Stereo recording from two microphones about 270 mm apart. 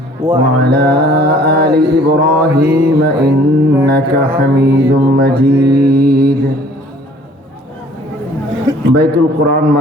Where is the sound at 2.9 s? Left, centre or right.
Right.